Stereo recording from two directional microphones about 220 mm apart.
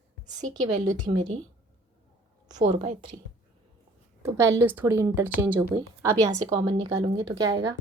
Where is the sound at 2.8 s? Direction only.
30° right (ahead or behind).